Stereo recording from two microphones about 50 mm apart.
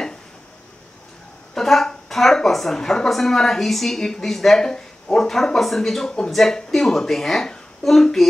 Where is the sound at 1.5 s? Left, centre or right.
Centre.